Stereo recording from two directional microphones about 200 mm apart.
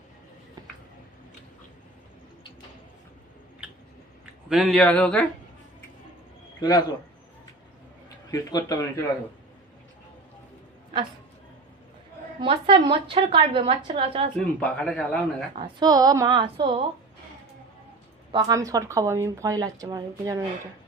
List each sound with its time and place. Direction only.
4.4 s speech: centre (ahead or behind)
6.6 s a man's voice: 20° left (ahead or behind)
8.3 s a man's voice: 20° left (ahead or behind)
12.4 s a woman's voice: 25° right (ahead or behind)
14.3 s speech: 5° left (ahead or behind)
15.5 s a woman's voice: 20° right (ahead or behind)
18.3 s speech: 20° right (ahead or behind)